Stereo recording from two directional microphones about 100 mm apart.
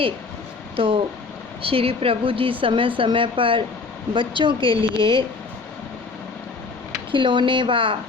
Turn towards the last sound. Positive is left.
turn(degrees=-60)  # may be behind; listen again after turning